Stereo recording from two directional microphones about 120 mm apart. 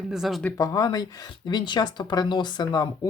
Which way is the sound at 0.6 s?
30° left (ahead or behind).